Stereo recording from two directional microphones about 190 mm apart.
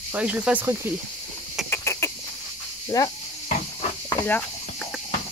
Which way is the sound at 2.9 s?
20° left (ahead or behind).